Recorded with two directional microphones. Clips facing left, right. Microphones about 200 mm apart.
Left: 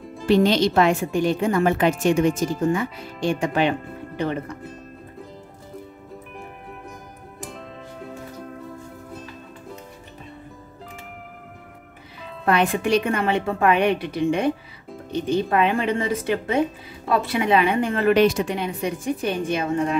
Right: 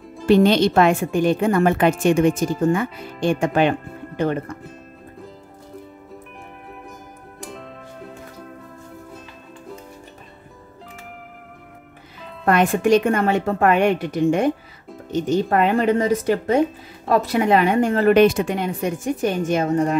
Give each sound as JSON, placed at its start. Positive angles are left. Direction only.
{"t": 0.3, "sound": "a woman's voice", "side_deg": -55}
{"t": 7.4, "sound": "music", "side_deg": 0}
{"t": 12.4, "sound": "a woman's voice", "side_deg": -50}